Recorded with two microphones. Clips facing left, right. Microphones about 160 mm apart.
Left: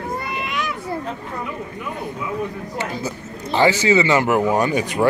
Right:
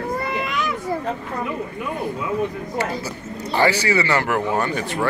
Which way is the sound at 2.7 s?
20° left (ahead or behind).